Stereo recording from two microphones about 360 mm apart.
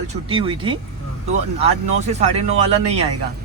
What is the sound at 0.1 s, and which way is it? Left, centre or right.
Speech, centre.